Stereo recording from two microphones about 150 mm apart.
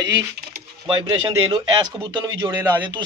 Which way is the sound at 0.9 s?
30° right (ahead or behind).